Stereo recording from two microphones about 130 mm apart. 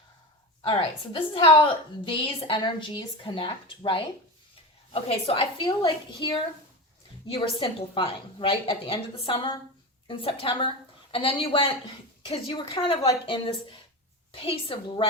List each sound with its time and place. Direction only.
0.6 s a woman's voice: 40° left (ahead or behind)